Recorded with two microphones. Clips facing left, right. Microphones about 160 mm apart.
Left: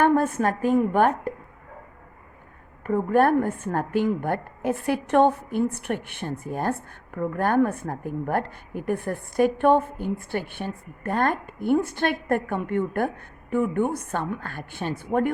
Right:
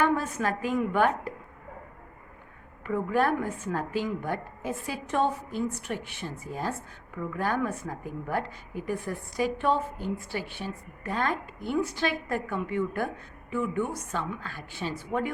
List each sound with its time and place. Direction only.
0.0 s a woman's voice: 55° left (ahead or behind)
2.8 s a woman's voice: 50° left (ahead or behind)